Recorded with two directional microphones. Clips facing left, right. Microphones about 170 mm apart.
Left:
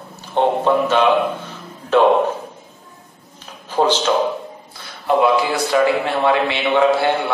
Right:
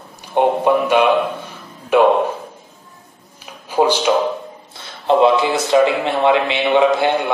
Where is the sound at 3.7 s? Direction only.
10° right (ahead or behind).